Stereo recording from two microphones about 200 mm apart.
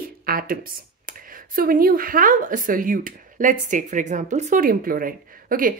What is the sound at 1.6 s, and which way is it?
Speech, 45° right (ahead or behind).